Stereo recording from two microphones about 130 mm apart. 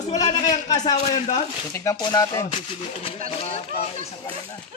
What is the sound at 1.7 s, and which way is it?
Speech, 20° left (ahead or behind).